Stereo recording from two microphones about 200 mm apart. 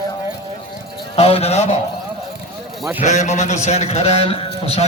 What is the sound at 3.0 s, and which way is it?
A man's voice, 35° left (ahead or behind).